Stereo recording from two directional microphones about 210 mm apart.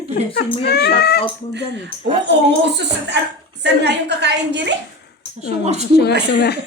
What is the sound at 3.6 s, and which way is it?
A woman's voice, 55° right (ahead or behind).